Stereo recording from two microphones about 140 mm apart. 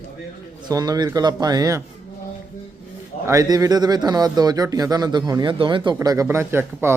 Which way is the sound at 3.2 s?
25° right (ahead or behind).